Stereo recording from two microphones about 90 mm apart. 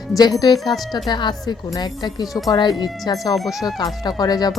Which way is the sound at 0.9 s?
55° left (ahead or behind).